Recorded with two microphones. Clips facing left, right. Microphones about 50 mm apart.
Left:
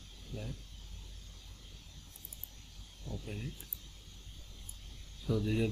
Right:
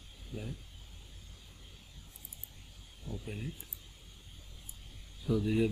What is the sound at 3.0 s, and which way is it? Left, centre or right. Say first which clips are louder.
Speech: right 2 dB; centre.